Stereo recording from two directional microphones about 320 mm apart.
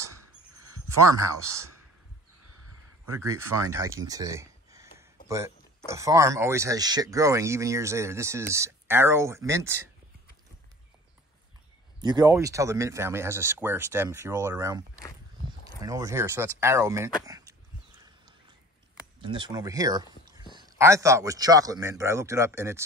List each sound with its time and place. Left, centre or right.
0.6 s a sound: right
1.1 s speech: centre
3.5 s speech: centre
4.9 s a sound: centre
5.9 s speech: centre
12.0 s speech: centre
15.8 s speech: centre
19.2 s speech: centre